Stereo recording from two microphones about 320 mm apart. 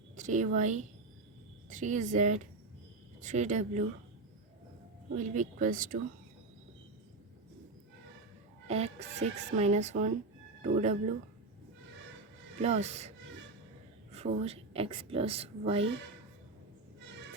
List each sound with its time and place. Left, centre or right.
0.2 s speech: right
5.1 s speech: right
8.6 s speech: centre
12.6 s a woman's voice: right